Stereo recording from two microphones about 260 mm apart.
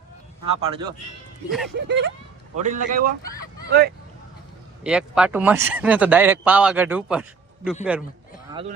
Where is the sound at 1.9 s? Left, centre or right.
Right.